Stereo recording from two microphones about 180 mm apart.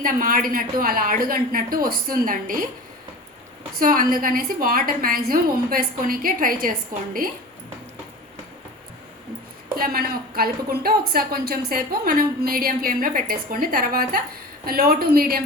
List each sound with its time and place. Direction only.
0.0 s a woman's voice: 50° right (ahead or behind)
3.8 s a woman's voice: 50° right (ahead or behind)
9.7 s a woman's voice: 55° right (ahead or behind)